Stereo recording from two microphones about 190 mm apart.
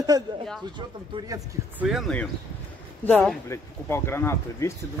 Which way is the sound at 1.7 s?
Centre (ahead or behind).